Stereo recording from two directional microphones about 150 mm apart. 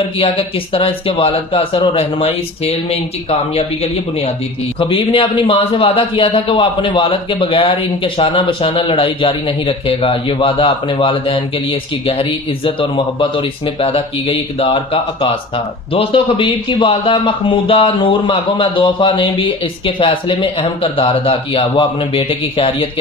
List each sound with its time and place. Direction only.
0.2 s a man's voice: 40° left (ahead or behind)